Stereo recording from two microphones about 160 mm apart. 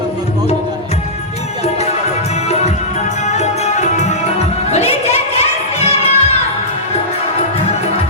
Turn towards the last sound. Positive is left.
turn(degrees=40)  # may be behind; listen again after turning